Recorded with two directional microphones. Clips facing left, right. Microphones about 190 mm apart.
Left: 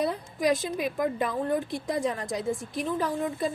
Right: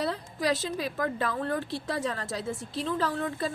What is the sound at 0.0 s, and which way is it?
Speech, 15° left (ahead or behind).